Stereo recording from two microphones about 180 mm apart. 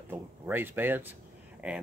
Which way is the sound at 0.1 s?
10° right (ahead or behind).